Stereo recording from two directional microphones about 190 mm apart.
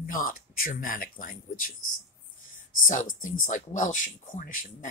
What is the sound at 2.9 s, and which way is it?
Speech, 45° left (ahead or behind).